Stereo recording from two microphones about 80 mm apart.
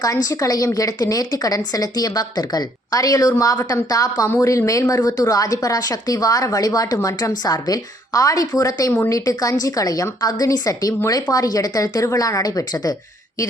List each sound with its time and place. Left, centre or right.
0.0 s a woman's voice: left